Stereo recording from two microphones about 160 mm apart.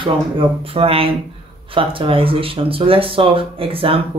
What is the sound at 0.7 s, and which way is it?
Speech, 35° right (ahead or behind).